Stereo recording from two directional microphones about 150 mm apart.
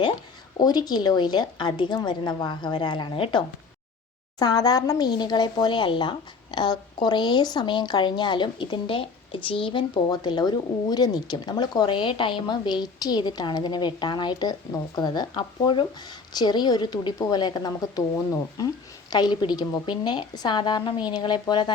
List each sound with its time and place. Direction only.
0.6 s speech: 25° left (ahead or behind)
19.1 s speech: 30° left (ahead or behind)